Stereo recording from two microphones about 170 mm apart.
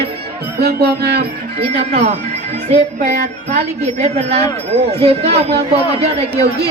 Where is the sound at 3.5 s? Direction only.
40° right (ahead or behind).